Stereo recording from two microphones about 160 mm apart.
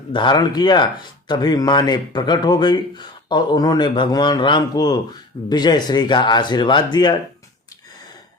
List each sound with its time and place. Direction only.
0.1 s speech: 30° left (ahead or behind)